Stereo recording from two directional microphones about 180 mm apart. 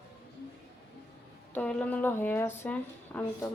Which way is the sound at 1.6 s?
5° left (ahead or behind).